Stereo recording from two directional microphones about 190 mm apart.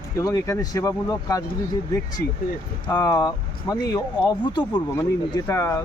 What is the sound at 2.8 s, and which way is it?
Speech, 20° left (ahead or behind).